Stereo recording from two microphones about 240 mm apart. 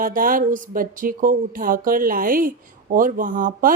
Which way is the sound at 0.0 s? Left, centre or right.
Right.